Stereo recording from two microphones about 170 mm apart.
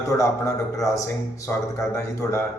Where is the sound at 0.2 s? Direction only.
20° left (ahead or behind).